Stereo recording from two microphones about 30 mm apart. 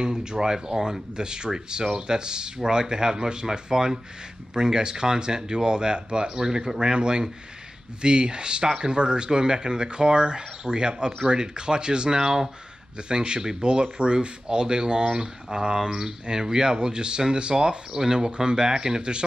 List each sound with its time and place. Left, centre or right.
0.0 s speech: right
12.2 s speech: centre
13.1 s speech: right